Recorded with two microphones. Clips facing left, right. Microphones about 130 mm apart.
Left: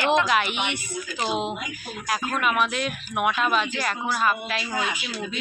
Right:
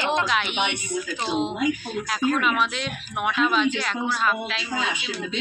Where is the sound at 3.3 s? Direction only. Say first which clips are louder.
Right 2 dB; 5° left (ahead or behind).